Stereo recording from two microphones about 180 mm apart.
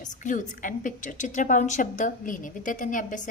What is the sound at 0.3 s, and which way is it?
A woman's voice, 45° left (ahead or behind).